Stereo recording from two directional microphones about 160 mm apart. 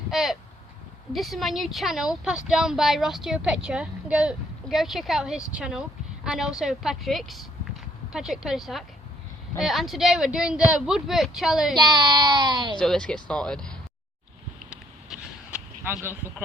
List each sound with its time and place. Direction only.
0.1 s a woman's voice: centre (ahead or behind)
11.8 s speech: 25° right (ahead or behind)
12.8 s a woman's voice: 5° left (ahead or behind)
14.7 s vehicle: 5° right (ahead or behind)